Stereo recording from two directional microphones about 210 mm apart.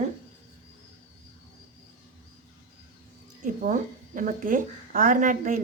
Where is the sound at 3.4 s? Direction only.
40° right (ahead or behind).